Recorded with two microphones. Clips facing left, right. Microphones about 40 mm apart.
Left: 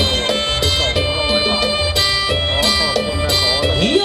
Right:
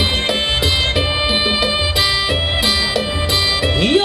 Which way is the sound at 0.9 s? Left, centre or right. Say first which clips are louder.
Even; centre.